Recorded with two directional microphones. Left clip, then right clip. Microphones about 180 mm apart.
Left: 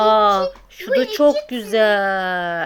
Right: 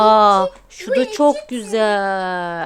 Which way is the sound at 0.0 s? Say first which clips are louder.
Right 3 dB; 30° right (ahead or behind).